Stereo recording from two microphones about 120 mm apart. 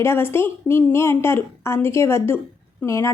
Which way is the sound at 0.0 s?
20° left (ahead or behind).